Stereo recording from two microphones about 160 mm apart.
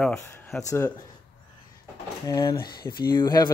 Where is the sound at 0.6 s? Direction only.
15° left (ahead or behind).